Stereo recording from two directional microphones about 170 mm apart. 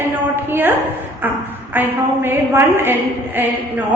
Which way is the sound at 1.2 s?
10° right (ahead or behind).